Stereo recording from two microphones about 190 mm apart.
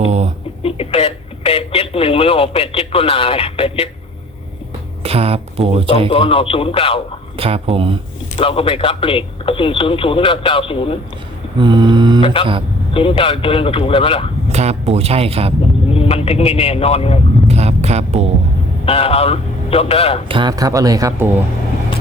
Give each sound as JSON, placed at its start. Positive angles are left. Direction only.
{"t": 0.0, "sound": "a sound", "side_deg": -35}
{"t": 0.6, "sound": "speech", "side_deg": 30}
{"t": 5.0, "sound": "speech", "side_deg": -30}
{"t": 6.1, "sound": "speech", "side_deg": 30}
{"t": 7.3, "sound": "speech", "side_deg": -30}
{"t": 8.4, "sound": "speech", "side_deg": 30}
{"t": 11.6, "sound": "speech", "side_deg": -25}
{"t": 12.2, "sound": "speech", "side_deg": 25}
{"t": 14.5, "sound": "speech", "side_deg": -35}
{"t": 15.9, "sound": "speech", "side_deg": 30}
{"t": 17.5, "sound": "music", "side_deg": -35}
{"t": 18.9, "sound": "speech", "side_deg": 30}
{"t": 20.2, "sound": "speech", "side_deg": -25}